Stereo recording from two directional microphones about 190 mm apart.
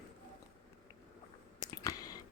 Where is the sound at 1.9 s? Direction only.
20° left (ahead or behind).